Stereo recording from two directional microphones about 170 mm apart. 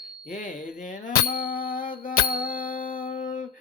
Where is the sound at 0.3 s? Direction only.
50° left (ahead or behind).